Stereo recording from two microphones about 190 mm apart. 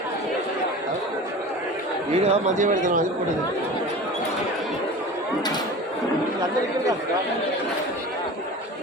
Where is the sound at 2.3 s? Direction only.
40° right (ahead or behind).